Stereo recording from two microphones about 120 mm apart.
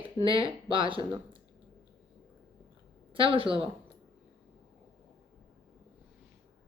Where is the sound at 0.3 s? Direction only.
45° right (ahead or behind).